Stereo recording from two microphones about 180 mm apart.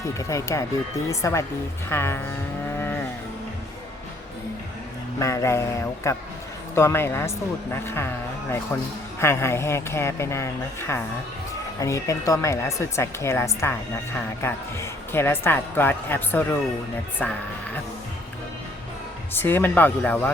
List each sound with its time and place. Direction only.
0.0 s a woman's voice: 15° left (ahead or behind)
2.7 s cattle: 10° left (ahead or behind)
5.2 s a woman's voice: 15° left (ahead or behind)
19.3 s a woman's voice: 10° left (ahead or behind)